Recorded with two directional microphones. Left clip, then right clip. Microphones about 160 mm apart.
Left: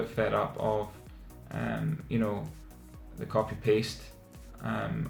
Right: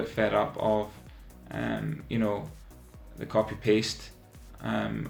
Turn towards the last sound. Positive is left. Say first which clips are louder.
# right 3 dB
turn(degrees=-40)  # may be behind; listen again after turning